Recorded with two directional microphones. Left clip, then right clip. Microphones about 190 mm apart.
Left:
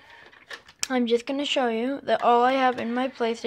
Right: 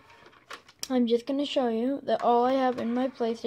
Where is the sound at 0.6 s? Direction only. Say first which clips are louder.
Left 2 dB; 10° right (ahead or behind).